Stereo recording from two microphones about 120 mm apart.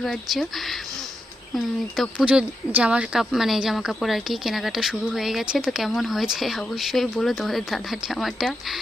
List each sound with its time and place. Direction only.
0.0 s speech: centre (ahead or behind)